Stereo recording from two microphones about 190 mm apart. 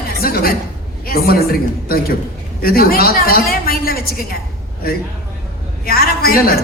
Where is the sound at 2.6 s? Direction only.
50° left (ahead or behind).